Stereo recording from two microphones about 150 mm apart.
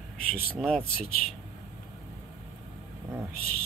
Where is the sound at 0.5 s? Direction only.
5° left (ahead or behind).